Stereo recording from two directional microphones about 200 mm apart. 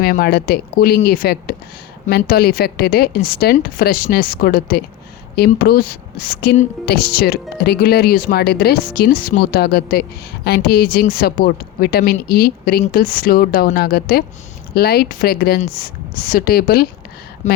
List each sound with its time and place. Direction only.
0.0 s speech: 50° left (ahead or behind)
17.4 s speech: 35° left (ahead or behind)